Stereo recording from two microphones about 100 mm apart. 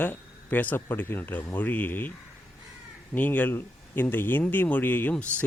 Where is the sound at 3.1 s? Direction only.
15° left (ahead or behind).